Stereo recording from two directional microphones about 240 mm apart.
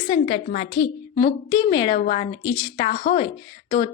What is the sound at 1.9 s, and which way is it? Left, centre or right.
A woman's voice, left.